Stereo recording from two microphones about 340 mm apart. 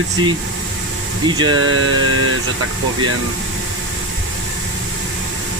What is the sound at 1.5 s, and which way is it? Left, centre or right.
Mantra, right.